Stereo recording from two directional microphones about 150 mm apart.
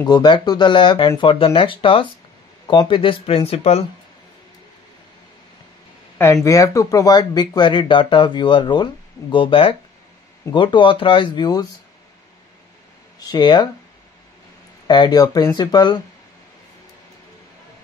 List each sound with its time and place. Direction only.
0.0 s speech: 30° left (ahead or behind); by 3.8 s 45° left (ahead or behind)
6.1 s speech: 20° left (ahead or behind)
13.2 s speech: 30° left (ahead or behind)
14.9 s speech: 25° left (ahead or behind)